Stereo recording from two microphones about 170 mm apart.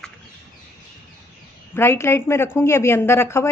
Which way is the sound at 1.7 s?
15° left (ahead or behind).